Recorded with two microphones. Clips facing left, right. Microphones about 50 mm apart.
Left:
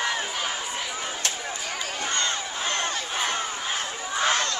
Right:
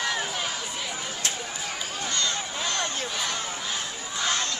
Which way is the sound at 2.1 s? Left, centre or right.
Left.